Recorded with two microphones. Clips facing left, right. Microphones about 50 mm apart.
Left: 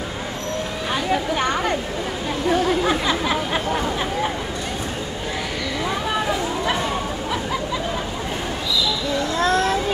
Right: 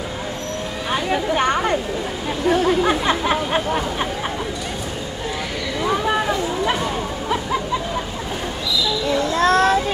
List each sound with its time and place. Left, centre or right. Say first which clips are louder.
9.4 s child singing: right 4 dB; right